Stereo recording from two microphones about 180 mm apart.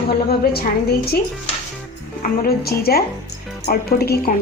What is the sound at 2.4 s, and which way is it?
A woman's voice, 60° left (ahead or behind).